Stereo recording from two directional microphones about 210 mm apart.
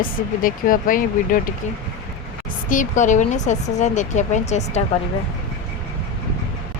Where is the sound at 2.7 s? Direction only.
35° left (ahead or behind).